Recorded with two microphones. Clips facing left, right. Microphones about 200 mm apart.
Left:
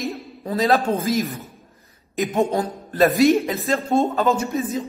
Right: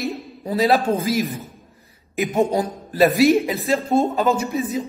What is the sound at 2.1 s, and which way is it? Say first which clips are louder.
A man's voice: right 1 dB; 10° right (ahead or behind).